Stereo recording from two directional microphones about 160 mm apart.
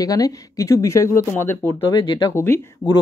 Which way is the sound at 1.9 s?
25° left (ahead or behind).